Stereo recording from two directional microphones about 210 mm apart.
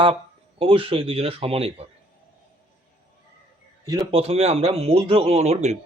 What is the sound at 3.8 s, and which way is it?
Speech, 20° right (ahead or behind).